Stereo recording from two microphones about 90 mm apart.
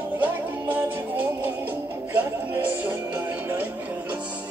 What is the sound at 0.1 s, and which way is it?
Music, 20° right (ahead or behind).